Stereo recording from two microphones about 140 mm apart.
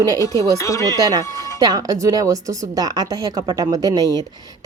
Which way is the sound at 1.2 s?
20° left (ahead or behind).